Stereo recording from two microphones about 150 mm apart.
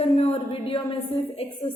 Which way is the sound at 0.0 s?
45° left (ahead or behind).